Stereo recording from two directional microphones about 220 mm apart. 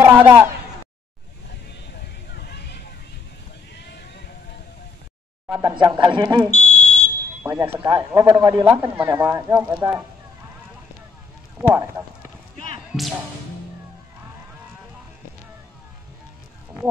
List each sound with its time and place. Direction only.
0.0 s speech: 10° right (ahead or behind)
2.3 s a sound: 45° left (ahead or behind)
5.5 s speech: 15° right (ahead or behind)
6.5 s smoke detector: 30° left (ahead or behind)
7.4 s speech: 10° right (ahead or behind)
11.7 s speech: 10° right (ahead or behind)
12.9 s speech: centre (ahead or behind)